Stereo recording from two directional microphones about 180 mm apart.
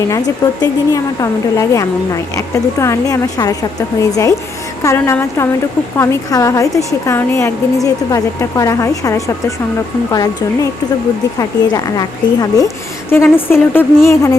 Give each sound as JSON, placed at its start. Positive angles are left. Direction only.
{"t": 0.6, "sound": "a woman's voice", "side_deg": 20}